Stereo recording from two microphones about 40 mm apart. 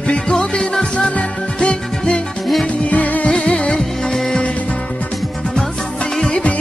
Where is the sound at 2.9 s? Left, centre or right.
Left.